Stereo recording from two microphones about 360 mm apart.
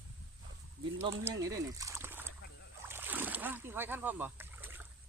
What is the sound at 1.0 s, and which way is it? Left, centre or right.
Speech, centre.